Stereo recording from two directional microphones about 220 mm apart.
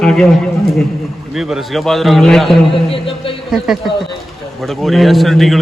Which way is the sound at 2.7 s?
25° left (ahead or behind).